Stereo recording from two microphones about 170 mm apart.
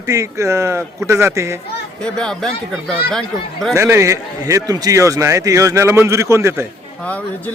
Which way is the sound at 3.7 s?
15° right (ahead or behind).